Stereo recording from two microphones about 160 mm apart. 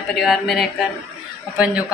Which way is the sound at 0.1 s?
Centre (ahead or behind).